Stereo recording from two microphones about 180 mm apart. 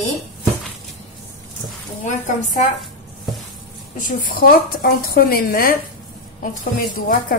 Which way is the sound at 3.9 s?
50° left (ahead or behind).